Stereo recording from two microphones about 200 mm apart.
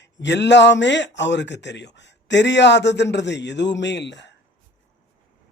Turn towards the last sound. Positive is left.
turn(degrees=60)  # may be behind; listen again after turning